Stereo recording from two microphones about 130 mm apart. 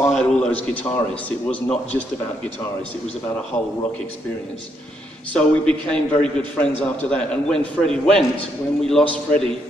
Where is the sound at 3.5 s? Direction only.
15° left (ahead or behind).